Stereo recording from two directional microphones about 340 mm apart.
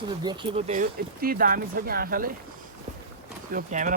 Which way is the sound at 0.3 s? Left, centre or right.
Centre.